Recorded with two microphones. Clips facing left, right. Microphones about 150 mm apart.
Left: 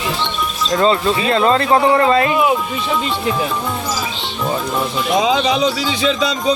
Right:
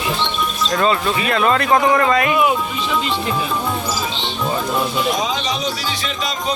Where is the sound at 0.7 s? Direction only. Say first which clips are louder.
Left 4 dB; 25° left (ahead or behind).